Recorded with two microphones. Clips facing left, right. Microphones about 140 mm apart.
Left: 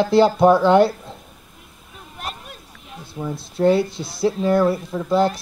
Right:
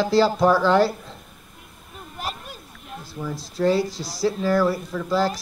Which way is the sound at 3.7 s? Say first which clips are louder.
Left 3 dB; centre (ahead or behind).